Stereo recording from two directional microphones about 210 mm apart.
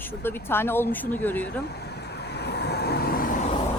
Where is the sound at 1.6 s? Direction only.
50° left (ahead or behind).